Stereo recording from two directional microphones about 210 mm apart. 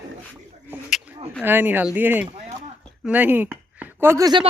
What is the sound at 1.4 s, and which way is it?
Speech, 10° right (ahead or behind).